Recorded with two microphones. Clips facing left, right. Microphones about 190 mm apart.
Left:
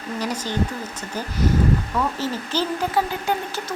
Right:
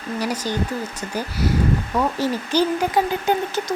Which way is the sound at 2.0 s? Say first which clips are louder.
Right 3 dB; 15° right (ahead or behind).